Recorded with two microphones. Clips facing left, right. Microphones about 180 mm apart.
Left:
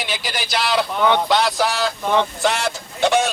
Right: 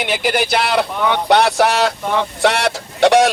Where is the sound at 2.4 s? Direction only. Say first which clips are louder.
Right 5 dB; 75° right (ahead or behind).